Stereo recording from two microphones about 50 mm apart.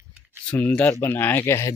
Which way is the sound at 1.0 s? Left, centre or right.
Left.